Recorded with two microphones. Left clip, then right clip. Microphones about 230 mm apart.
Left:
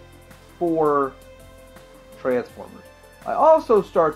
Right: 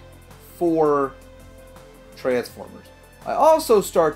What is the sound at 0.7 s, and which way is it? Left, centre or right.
Speech, right.